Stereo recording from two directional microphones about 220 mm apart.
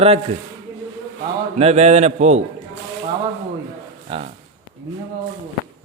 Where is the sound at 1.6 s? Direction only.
30° right (ahead or behind).